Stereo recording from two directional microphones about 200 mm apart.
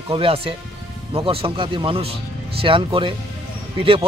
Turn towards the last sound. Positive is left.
turn(degrees=-25)  # may be behind; listen again after turning